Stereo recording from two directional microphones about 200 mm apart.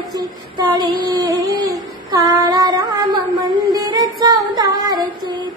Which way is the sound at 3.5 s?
20° right (ahead or behind).